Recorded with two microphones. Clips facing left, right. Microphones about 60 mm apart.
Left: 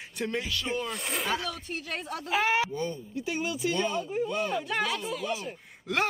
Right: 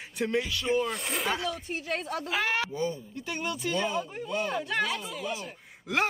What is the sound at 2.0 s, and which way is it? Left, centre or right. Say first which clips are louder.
Speech: right 3 dB; right.